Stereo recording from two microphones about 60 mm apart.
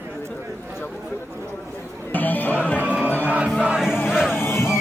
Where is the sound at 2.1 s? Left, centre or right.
Left.